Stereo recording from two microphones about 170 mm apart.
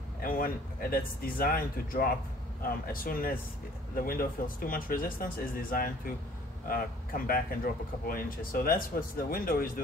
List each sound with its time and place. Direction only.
0.2 s speech: 55° left (ahead or behind)